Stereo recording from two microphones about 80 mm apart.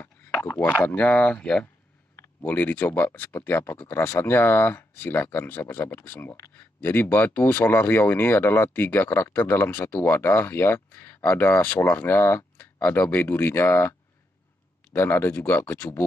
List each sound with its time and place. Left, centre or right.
0.0 s a sound: left
0.7 s speech: left
2.1 s speech: left
15.0 s speech: left